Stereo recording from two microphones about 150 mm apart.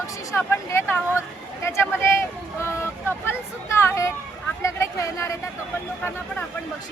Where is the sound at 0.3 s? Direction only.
15° left (ahead or behind).